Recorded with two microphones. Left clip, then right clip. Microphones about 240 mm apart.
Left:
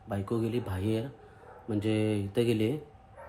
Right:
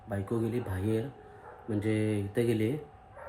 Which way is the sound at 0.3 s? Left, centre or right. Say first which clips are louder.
Left 1 dB; left.